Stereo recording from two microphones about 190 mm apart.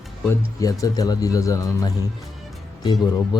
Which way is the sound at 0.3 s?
20° left (ahead or behind).